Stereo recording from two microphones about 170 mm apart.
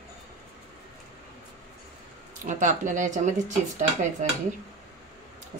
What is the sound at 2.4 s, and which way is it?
Speech, 45° right (ahead or behind).